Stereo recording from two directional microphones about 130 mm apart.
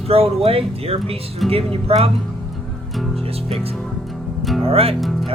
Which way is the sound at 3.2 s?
50° right (ahead or behind).